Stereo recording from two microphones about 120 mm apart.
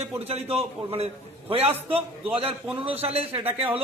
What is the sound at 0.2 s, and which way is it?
A man's voice, 55° right (ahead or behind).